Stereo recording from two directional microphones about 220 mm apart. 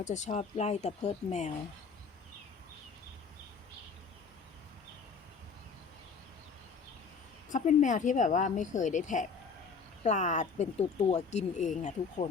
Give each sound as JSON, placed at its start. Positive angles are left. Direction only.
{"t": 0.0, "sound": "speech", "side_deg": 30}
{"t": 7.5, "sound": "speech", "side_deg": 35}